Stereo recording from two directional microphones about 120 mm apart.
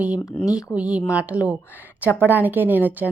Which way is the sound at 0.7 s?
10° right (ahead or behind).